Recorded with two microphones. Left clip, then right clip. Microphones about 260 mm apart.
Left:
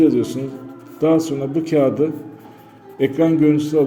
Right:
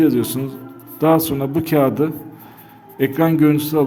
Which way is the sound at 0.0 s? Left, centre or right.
Right.